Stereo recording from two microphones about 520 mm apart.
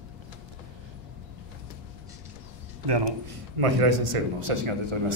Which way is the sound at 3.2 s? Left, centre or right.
Right.